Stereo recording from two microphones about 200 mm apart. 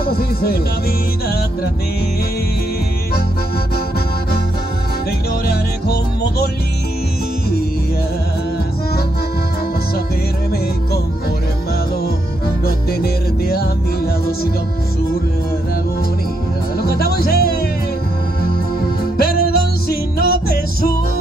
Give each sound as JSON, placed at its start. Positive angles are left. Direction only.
{"t": 0.0, "sound": "music", "side_deg": 50}
{"t": 5.5, "sound": "music", "side_deg": 50}
{"t": 12.6, "sound": "music", "side_deg": 50}
{"t": 16.7, "sound": "music", "side_deg": 50}
{"t": 19.1, "sound": "music", "side_deg": 50}